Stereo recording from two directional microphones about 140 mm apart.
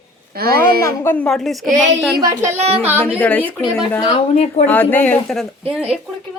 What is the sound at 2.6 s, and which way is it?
Speech, 45° right (ahead or behind).